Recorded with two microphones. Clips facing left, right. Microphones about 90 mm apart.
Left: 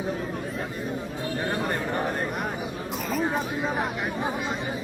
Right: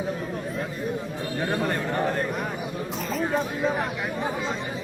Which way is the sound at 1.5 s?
15° left (ahead or behind).